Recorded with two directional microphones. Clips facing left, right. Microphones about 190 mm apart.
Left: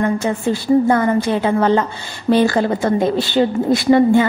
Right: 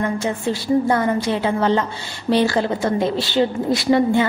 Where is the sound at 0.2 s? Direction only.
50° left (ahead or behind).